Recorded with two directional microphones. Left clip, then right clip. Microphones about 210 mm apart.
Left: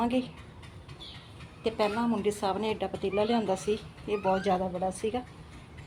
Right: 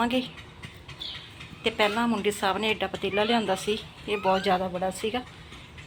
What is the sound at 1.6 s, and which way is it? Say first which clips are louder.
Speech: right 4 dB; centre (ahead or behind).